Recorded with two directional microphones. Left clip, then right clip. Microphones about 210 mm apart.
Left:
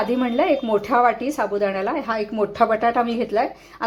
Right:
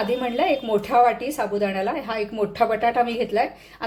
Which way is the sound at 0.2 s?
15° left (ahead or behind).